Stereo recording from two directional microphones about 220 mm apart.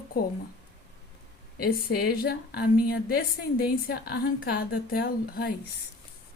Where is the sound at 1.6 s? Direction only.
45° left (ahead or behind).